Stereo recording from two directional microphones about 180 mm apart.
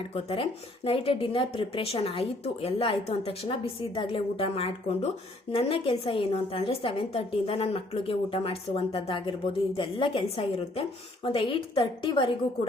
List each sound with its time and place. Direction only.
0.1 s a woman's voice: 35° left (ahead or behind)